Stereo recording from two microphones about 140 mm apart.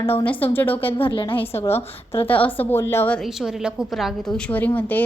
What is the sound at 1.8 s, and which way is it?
Speech, 40° left (ahead or behind).